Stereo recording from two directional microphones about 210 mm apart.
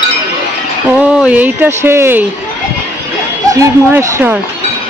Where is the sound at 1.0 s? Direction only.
5° right (ahead or behind).